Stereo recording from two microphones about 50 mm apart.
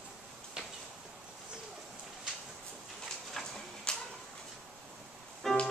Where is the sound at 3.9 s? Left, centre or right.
Centre.